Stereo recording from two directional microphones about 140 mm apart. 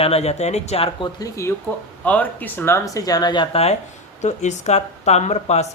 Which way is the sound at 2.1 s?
10° left (ahead or behind).